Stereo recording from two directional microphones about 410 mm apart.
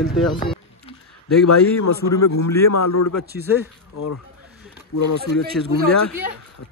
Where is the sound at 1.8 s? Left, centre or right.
Left.